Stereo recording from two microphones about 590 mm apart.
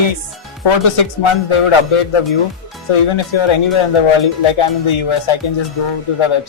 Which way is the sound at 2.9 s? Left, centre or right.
Left.